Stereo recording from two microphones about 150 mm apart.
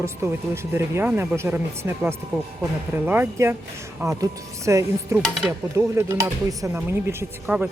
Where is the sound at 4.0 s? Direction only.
20° right (ahead or behind).